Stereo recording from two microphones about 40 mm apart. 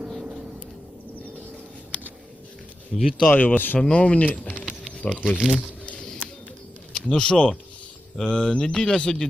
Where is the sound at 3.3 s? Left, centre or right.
Left.